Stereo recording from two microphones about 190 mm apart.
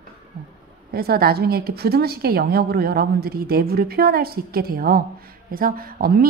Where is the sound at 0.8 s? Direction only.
55° right (ahead or behind).